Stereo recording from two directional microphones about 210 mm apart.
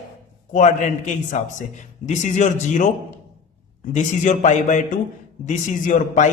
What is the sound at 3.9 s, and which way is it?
A woman's voice, 35° left (ahead or behind).